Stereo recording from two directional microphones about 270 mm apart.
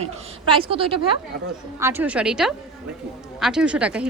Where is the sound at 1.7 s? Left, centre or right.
Centre.